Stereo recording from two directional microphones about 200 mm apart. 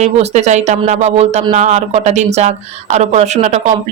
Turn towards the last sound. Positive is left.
turn(degrees=-35)  # may be behind; listen again after turning